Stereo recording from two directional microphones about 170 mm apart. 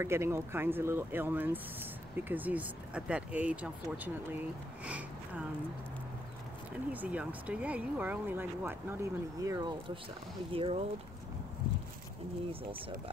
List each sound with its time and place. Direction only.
0.0 s speech: 15° right (ahead or behind)
6.9 s speech: 10° right (ahead or behind); by 10.8 s 35° right (ahead or behind)